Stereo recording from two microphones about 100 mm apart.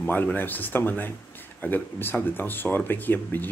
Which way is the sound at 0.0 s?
20° left (ahead or behind).